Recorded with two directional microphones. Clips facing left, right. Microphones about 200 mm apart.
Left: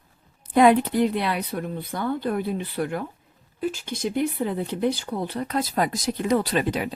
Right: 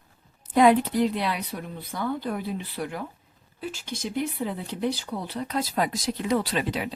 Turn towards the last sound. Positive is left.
turn(degrees=45)  # may be behind; listen again after turning